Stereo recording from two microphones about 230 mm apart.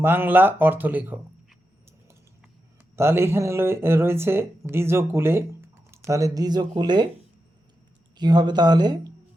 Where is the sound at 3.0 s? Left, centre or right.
Centre.